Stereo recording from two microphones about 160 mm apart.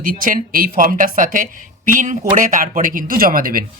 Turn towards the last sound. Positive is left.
turn(degrees=-65)  # may be behind; listen again after turning